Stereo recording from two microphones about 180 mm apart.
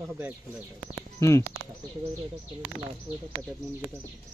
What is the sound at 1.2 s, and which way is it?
Speech, 15° left (ahead or behind).